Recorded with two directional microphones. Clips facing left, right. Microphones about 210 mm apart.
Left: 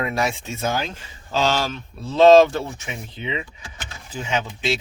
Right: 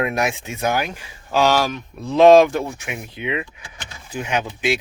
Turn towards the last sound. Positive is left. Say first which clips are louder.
# right 2 dB
turn(degrees=-15)  # may be behind; listen again after turning